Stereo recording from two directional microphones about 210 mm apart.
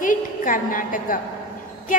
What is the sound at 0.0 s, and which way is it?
A woman's voice, 40° left (ahead or behind).